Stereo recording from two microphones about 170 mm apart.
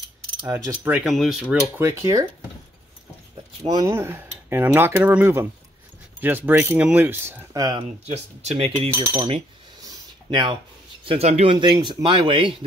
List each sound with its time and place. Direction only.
0.4 s speech: 15° right (ahead or behind)
1.0 s speech: centre (ahead or behind)
1.8 s speech: 15° right (ahead or behind)
3.6 s speech: 20° right (ahead or behind)
8.1 s speech: 35° right (ahead or behind)
9.8 s a sound: 25° right (ahead or behind)
11.1 s speech: 40° right (ahead or behind)
11.5 s speech: 30° right (ahead or behind)